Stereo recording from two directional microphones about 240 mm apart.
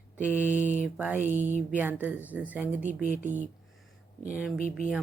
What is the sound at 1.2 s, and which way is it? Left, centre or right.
Speech, right.